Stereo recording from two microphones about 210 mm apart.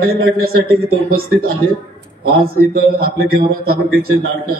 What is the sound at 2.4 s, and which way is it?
Speech, 45° right (ahead or behind).